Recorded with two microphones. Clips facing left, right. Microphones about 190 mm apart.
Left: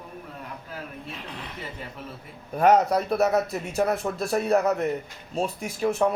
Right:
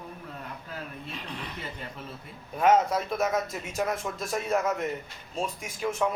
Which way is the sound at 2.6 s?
40° left (ahead or behind).